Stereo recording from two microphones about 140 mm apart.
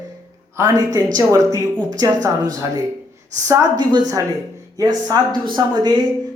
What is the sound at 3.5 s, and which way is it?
Speech, 25° right (ahead or behind).